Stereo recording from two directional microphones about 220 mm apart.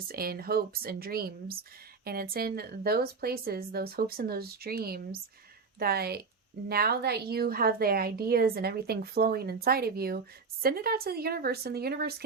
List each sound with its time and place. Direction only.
0.1 s a woman's voice: 45° right (ahead or behind)